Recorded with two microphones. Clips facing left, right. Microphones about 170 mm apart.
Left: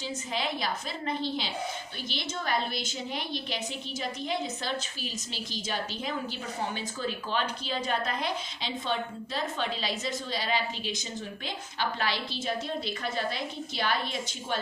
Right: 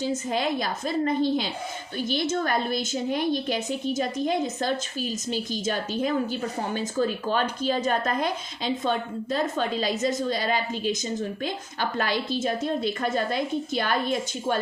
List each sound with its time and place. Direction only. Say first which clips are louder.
0.0 s a woman's voice: right 7 dB; 45° right (ahead or behind)